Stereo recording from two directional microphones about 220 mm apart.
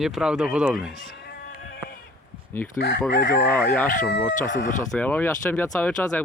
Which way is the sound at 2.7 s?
50° left (ahead or behind).